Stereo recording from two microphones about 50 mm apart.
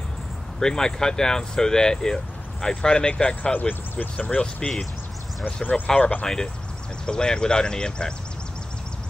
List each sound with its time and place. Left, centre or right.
0.6 s speech: centre
3.5 s speech: left
4.6 s speech: centre
5.4 s speech: left
6.2 s speech: centre